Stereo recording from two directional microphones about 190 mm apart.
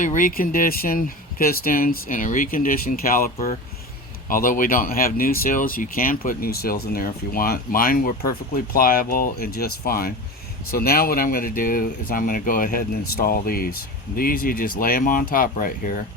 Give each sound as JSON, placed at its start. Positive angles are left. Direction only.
{"t": 0.0, "sound": "speech", "side_deg": 45}